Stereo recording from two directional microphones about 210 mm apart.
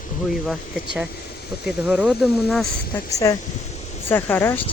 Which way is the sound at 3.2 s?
15° left (ahead or behind).